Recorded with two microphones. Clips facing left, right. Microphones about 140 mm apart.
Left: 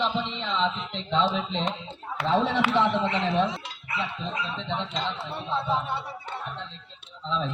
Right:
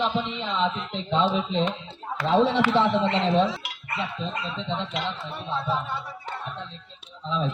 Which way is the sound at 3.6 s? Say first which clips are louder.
Even; 65° right (ahead or behind).